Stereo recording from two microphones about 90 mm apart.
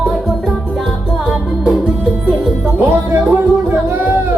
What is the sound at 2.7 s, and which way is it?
Music, 25° right (ahead or behind).